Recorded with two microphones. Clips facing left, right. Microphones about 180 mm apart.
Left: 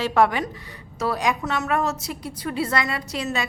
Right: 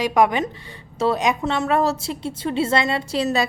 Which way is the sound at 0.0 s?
15° right (ahead or behind).